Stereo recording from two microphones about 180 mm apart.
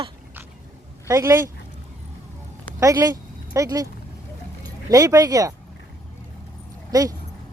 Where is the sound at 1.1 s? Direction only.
15° right (ahead or behind).